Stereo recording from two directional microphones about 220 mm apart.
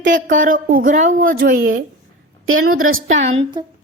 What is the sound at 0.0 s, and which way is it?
A woman's voice, 35° right (ahead or behind).